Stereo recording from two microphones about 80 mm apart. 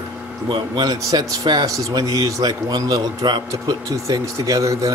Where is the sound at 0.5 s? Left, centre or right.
Right.